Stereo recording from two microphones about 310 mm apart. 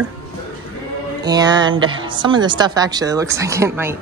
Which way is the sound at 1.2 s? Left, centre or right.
Centre.